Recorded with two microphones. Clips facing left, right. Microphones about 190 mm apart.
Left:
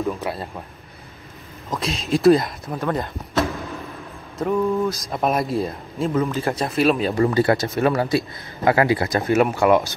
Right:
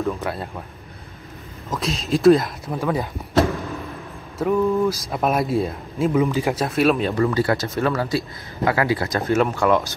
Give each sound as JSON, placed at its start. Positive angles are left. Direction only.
{"t": 0.0, "sound": "speech", "side_deg": 0}
{"t": 1.7, "sound": "speech", "side_deg": 0}
{"t": 4.4, "sound": "speech", "side_deg": 0}
{"t": 7.2, "sound": "speech", "side_deg": 25}